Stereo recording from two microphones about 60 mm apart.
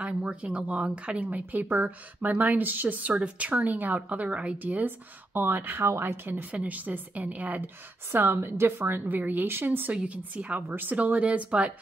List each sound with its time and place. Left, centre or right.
0.0 s a woman's voice: centre; by 6.4 s right
6.5 s a woman's voice: right
9.9 s speech: right
10.7 s a woman's voice: right
11.0 s speech: right